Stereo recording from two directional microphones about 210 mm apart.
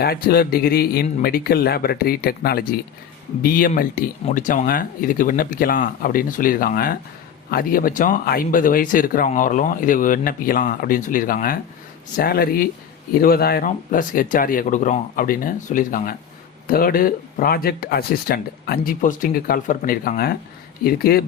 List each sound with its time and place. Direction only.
0.0 s speech: 45° left (ahead or behind)